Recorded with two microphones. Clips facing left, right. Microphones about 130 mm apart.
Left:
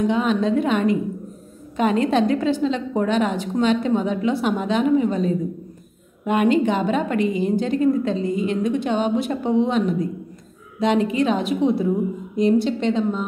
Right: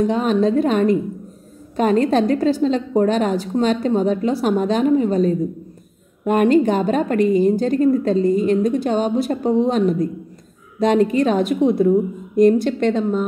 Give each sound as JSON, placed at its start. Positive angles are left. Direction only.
{"t": 0.0, "sound": "a woman's voice", "side_deg": -40}